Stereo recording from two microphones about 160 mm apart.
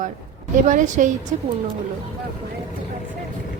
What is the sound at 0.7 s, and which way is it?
Speech, 50° right (ahead or behind).